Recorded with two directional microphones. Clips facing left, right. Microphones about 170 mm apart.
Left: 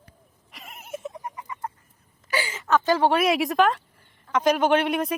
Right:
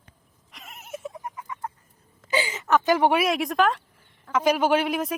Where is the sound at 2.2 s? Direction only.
20° right (ahead or behind).